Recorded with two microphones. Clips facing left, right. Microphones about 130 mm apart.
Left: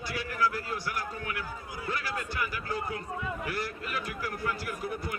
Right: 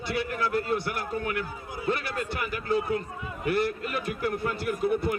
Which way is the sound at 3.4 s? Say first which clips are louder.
Right 8 dB; 25° right (ahead or behind).